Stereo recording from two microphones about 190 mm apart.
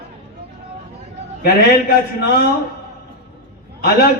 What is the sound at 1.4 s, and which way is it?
Speech, 55° left (ahead or behind).